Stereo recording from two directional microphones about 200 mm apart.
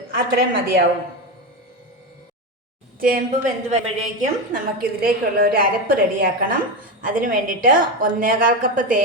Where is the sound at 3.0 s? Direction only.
40° right (ahead or behind).